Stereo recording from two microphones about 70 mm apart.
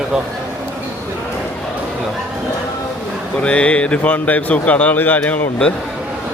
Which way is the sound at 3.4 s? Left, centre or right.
Centre.